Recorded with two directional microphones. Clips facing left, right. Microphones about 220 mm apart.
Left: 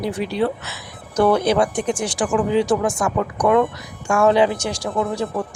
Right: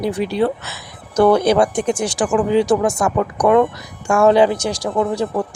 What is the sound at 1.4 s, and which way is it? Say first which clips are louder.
Speech: right 3 dB; 45° right (ahead or behind).